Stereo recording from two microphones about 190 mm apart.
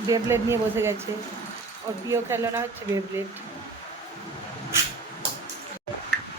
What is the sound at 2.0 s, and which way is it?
Speech, 15° right (ahead or behind).